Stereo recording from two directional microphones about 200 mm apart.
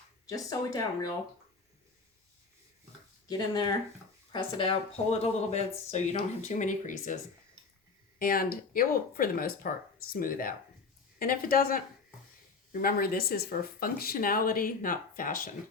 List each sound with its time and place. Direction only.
0.3 s speech: 15° left (ahead or behind)
3.2 s speech: 20° left (ahead or behind); by 7.2 s 40° left (ahead or behind)
8.2 s speech: 45° left (ahead or behind)
12.8 s speech: 50° left (ahead or behind)